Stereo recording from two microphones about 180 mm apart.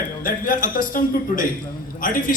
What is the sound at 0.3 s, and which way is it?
A man's voice, 50° left (ahead or behind).